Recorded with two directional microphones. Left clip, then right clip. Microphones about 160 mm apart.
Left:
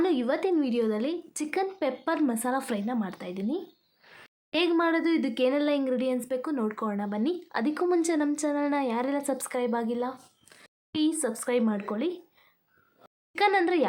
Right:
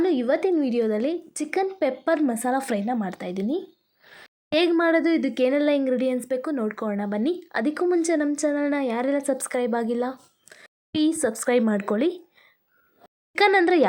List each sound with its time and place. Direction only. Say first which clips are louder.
0.0 s a woman's voice: right 4 dB; 15° right (ahead or behind); by 3.6 s 30° right (ahead or behind)
4.0 s a sound: right 4 dB; 25° right (ahead or behind)
4.7 s a woman's voice: right 3 dB; 20° right (ahead or behind); by 13.8 s 35° right (ahead or behind)